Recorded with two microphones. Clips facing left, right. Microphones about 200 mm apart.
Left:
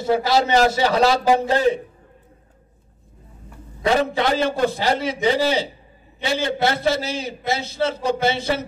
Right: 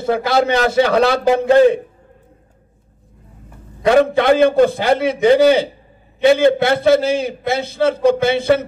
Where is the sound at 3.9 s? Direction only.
55° right (ahead or behind).